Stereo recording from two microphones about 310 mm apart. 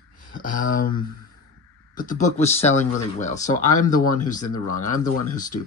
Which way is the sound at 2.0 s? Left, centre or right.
Left.